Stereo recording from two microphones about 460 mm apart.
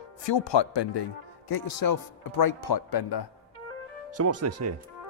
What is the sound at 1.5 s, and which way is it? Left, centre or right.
Speech, left.